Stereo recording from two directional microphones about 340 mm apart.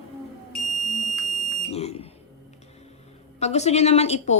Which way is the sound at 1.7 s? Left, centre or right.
Centre.